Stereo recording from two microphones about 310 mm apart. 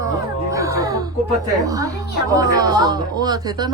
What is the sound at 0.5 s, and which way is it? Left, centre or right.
Music, centre.